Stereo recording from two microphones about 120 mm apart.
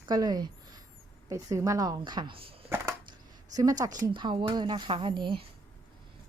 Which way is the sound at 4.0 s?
40° right (ahead or behind).